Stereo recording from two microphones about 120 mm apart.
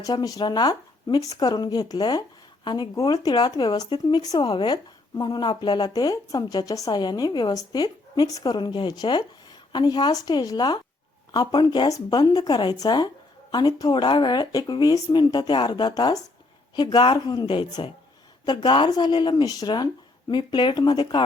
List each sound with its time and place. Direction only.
0.0 s speech: 35° left (ahead or behind)